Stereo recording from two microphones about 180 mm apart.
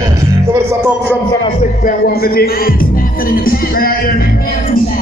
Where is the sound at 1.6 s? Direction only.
50° left (ahead or behind).